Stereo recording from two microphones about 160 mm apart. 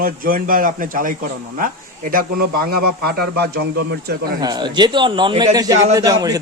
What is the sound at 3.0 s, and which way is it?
A man's voice, 80° right.